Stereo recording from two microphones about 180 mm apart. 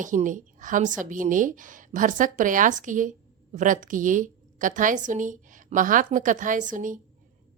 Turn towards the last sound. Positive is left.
turn(degrees=-45)  # may be behind; listen again after turning